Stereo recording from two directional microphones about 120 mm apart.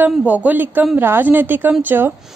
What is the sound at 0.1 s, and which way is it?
A woman's voice, 10° right (ahead or behind).